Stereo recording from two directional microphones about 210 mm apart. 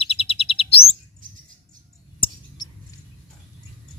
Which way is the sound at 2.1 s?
25° left (ahead or behind).